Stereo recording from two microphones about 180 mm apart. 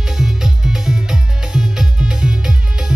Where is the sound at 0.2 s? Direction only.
5° right (ahead or behind).